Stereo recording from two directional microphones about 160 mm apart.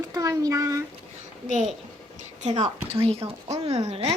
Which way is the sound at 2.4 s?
45° right (ahead or behind).